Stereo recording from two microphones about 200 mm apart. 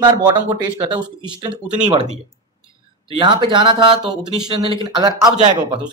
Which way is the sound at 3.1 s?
25° right (ahead or behind).